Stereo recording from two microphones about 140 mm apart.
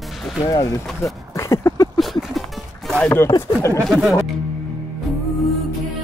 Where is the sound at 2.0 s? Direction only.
Centre (ahead or behind).